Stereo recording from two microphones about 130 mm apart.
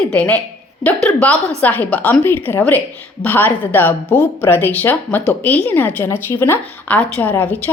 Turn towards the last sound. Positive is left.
turn(degrees=15)  # may be behind; listen again after turning